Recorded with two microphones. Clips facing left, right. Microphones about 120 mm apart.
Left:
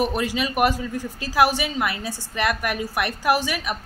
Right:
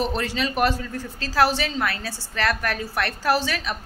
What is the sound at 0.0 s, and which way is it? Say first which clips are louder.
Speech: left 2 dB; 10° left (ahead or behind).